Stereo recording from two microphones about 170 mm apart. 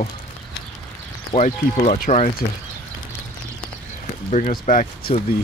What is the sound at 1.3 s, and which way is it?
Speech, 40° left (ahead or behind).